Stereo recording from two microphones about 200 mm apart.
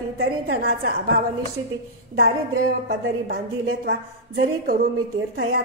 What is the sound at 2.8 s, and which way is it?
A woman's voice, 50° right (ahead or behind).